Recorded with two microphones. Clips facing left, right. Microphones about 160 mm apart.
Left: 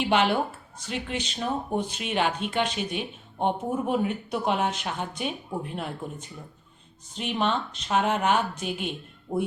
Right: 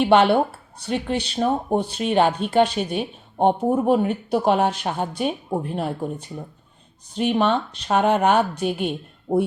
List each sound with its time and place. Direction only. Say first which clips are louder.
0.9 s speech: right 7 dB; 40° right (ahead or behind)
9.3 s speech: right 8 dB; 25° right (ahead or behind)